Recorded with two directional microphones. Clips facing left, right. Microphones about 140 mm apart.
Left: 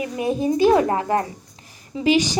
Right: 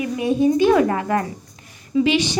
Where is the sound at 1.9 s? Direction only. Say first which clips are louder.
Right 1 dB; 40° left (ahead or behind).